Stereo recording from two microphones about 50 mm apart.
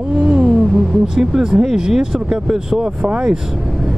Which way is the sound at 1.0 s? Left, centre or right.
Centre.